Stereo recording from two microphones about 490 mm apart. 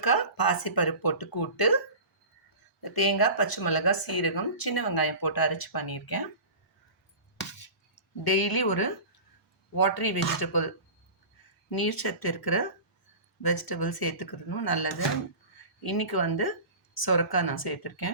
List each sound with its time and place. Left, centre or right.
0.0 s speech: left
2.8 s speech: left
8.2 s speech: left
11.7 s speech: left